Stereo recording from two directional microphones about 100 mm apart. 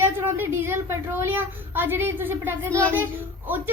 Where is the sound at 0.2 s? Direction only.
20° right (ahead or behind).